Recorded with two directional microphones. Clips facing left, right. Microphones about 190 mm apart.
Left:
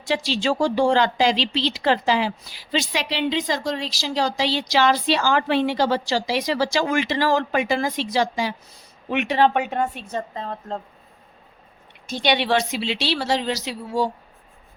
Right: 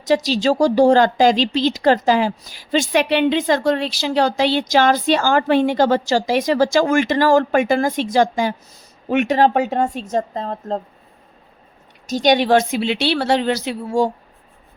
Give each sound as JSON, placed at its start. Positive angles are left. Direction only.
{"t": 0.0, "sound": "a woman's voice", "side_deg": -40}
{"t": 12.0, "sound": "speech", "side_deg": -45}